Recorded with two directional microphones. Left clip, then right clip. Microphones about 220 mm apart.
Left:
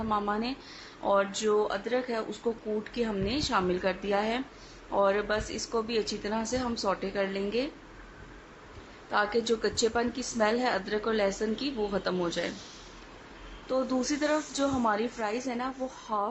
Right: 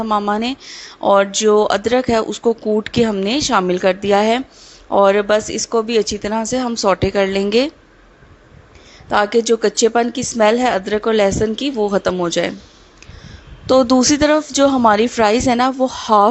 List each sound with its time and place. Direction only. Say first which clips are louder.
0.1 s a woman's voice: right 12 dB; 30° right (ahead or behind)
9.0 s a woman's voice: right 13 dB; 35° right (ahead or behind)
13.7 s a woman's voice: right 17 dB; 35° right (ahead or behind)